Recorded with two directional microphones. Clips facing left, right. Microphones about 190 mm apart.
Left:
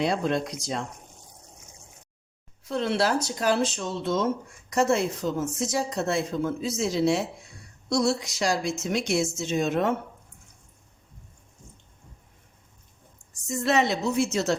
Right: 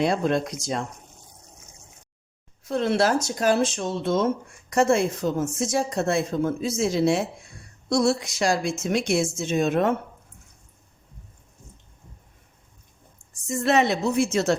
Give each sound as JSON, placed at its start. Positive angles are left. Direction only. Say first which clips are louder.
{"t": 0.0, "sound": "speech", "louder": "right 3 dB", "side_deg": -50}
{"t": 2.6, "sound": "a woman's voice", "louder": "right 3 dB", "side_deg": -45}
{"t": 13.6, "sound": "a woman's voice", "louder": "right 3 dB", "side_deg": -55}